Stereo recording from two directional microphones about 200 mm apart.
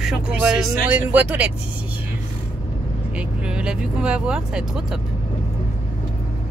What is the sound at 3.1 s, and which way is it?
Speech, 5° right (ahead or behind).